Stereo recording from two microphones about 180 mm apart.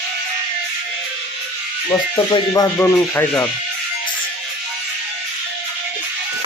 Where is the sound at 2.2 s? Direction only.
25° left (ahead or behind).